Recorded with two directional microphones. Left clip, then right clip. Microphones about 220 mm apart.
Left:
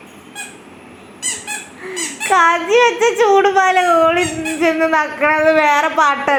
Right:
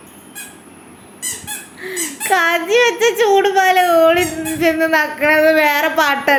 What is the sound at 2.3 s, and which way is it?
A child's voice, 10° right (ahead or behind).